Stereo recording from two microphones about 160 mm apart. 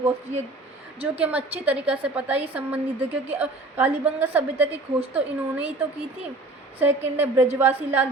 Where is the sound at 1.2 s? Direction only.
10° right (ahead or behind).